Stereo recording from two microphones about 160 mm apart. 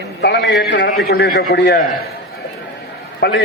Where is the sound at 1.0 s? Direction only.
75° left (ahead or behind).